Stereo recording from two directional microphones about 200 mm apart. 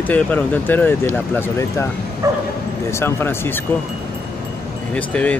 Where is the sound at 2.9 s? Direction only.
10° left (ahead or behind).